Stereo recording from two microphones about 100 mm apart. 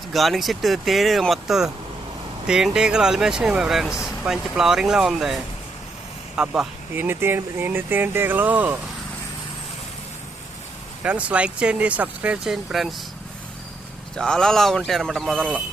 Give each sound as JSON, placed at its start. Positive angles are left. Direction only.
{"t": 0.1, "sound": "speech", "side_deg": 0}
{"t": 6.9, "sound": "speech", "side_deg": -20}
{"t": 11.0, "sound": "speech", "side_deg": -10}
{"t": 14.2, "sound": "speech", "side_deg": 5}